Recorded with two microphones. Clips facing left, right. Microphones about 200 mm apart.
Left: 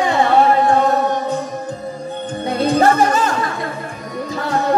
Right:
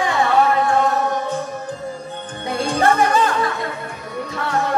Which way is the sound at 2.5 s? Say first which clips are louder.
Left 4 dB; 40° left (ahead or behind).